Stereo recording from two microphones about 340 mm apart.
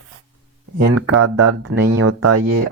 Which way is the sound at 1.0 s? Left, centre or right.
Right.